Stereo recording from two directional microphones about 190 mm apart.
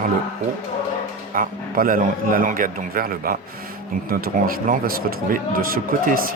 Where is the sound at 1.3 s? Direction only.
45° right (ahead or behind).